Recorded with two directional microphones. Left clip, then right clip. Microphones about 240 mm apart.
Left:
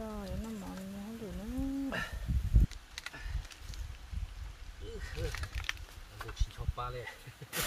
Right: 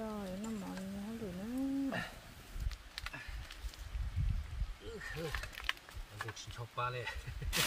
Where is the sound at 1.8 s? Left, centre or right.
Left.